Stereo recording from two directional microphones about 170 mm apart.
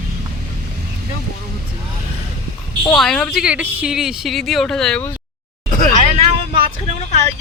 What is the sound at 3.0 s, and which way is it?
Speech, 5° left (ahead or behind).